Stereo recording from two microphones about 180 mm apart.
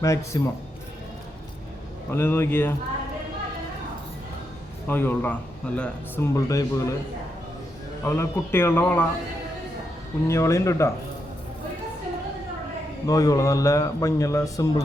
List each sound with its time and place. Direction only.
0.0 s speech: 15° left (ahead or behind)
2.0 s speech: 10° left (ahead or behind)
4.9 s speech: 10° left (ahead or behind)
8.0 s speech: 15° left (ahead or behind)
10.2 s speech: 15° left (ahead or behind)
13.1 s speech: 20° left (ahead or behind)